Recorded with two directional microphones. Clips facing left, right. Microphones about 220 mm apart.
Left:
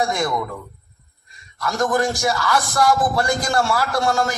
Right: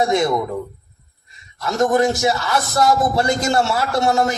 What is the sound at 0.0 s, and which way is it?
Speech, 25° right (ahead or behind).